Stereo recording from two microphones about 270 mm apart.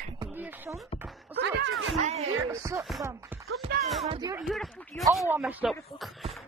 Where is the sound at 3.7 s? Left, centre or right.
Right.